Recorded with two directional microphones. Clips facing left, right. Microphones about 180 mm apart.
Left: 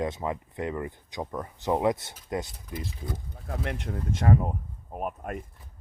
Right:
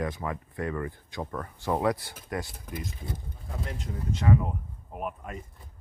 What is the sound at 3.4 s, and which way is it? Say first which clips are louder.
Speech: left 4 dB; 65° left (ahead or behind).